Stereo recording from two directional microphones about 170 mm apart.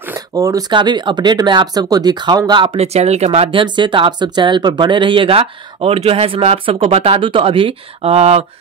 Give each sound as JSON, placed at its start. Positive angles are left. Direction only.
{"t": 0.0, "sound": "speech", "side_deg": -15}